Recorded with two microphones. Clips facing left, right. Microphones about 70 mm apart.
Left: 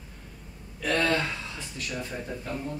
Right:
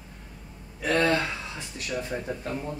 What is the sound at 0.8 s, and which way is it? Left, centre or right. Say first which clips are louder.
Speech: right 2 dB; centre.